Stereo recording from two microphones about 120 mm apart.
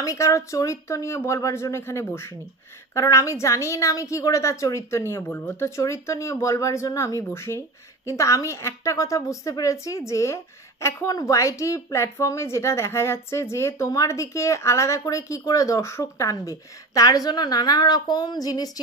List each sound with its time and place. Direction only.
0.0 s a woman's voice: 25° left (ahead or behind)